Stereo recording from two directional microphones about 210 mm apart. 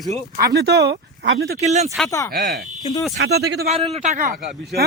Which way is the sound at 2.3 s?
50° right (ahead or behind).